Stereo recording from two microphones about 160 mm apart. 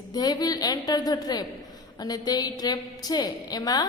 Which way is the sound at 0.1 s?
25° left (ahead or behind).